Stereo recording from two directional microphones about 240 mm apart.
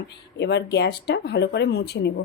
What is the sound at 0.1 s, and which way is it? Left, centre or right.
A woman's voice, left.